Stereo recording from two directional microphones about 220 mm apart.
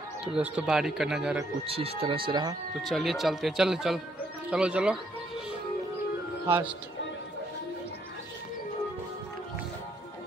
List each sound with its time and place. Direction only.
0.2 s speech: 5° right (ahead or behind)
1.7 s speech: 25° right (ahead or behind)
2.8 s speech: centre (ahead or behind)